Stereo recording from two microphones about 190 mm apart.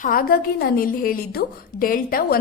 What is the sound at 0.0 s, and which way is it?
A woman's voice, 45° left (ahead or behind).